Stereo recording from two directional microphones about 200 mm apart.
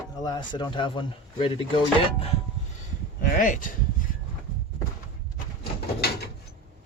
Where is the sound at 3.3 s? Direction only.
40° left (ahead or behind).